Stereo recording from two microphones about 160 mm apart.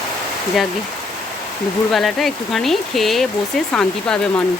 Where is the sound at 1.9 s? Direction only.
Centre (ahead or behind).